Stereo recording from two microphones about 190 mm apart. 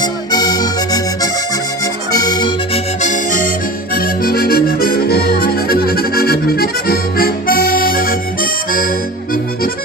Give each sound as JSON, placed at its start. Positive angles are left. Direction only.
{"t": 0.0, "sound": "music", "side_deg": 20}
{"t": 1.8, "sound": "accordion", "side_deg": 20}
{"t": 3.0, "sound": "accordion", "side_deg": 40}